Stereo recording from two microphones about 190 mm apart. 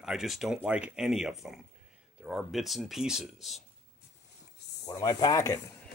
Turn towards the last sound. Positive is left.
turn(degrees=20)  # may be behind; listen again after turning